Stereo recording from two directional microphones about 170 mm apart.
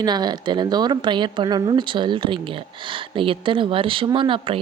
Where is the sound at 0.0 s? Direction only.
25° right (ahead or behind).